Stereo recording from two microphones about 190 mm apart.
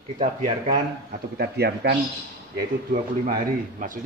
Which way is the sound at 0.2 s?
35° right (ahead or behind).